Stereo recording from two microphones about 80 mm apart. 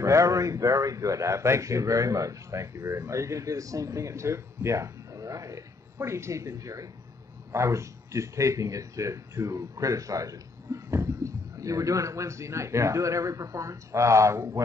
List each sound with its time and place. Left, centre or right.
0.0 s a man's voice: right